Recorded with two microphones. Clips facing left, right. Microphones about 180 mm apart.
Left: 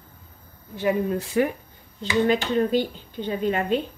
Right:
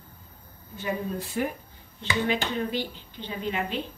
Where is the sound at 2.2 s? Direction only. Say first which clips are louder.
Left 7 dB; 45° left (ahead or behind).